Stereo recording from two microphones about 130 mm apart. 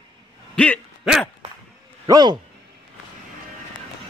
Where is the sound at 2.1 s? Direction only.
35° right (ahead or behind).